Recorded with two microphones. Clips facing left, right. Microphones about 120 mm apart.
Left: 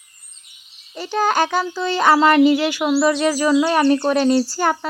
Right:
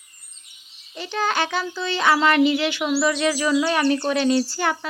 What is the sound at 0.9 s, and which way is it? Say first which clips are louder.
Speech: left 5 dB; 40° left (ahead or behind).